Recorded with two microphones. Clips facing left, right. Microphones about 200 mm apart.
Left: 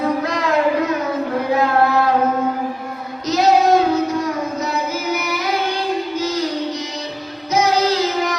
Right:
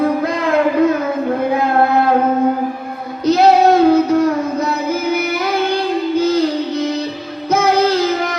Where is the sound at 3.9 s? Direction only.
60° right (ahead or behind).